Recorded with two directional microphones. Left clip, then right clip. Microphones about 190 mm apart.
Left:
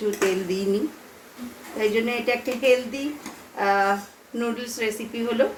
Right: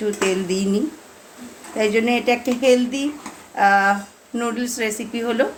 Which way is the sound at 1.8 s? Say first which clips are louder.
Right 5 dB; 60° right (ahead or behind).